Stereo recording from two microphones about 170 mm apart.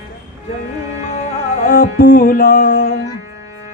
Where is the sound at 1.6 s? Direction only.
55° left (ahead or behind); by 2.8 s 70° left (ahead or behind).